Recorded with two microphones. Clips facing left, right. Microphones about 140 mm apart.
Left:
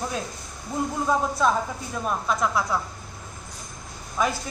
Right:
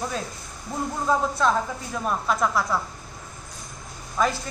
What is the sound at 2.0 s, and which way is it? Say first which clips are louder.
Speech: right 1 dB; centre (ahead or behind).